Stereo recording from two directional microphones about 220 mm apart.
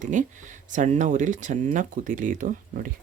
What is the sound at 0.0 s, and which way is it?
Speech, 35° right (ahead or behind).